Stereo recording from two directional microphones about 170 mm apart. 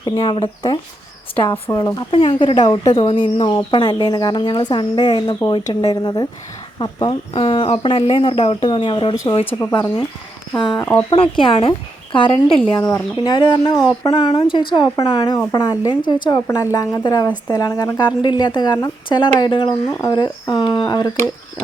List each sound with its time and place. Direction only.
0.0 s speech: 20° left (ahead or behind)
9.5 s speech: 10° left (ahead or behind)
10.6 s speech: 25° left (ahead or behind)
10.8 s speech: 10° left (ahead or behind)
11.3 s a woman's voice: 30° left (ahead or behind)